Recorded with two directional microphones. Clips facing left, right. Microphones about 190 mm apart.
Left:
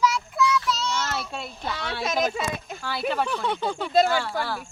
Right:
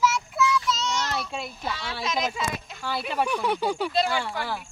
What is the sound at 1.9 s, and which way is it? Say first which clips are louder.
Speech: left 4 dB; 50° left (ahead or behind).